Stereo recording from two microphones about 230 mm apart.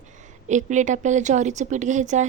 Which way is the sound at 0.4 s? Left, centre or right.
Right.